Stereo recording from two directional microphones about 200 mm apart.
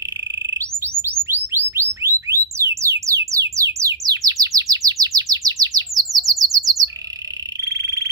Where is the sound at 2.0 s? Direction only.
15° right (ahead or behind).